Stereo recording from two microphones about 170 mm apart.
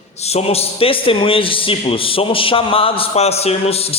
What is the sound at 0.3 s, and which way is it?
A man's voice, 35° left (ahead or behind).